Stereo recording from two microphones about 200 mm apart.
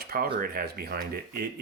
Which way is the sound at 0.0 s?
50° right (ahead or behind).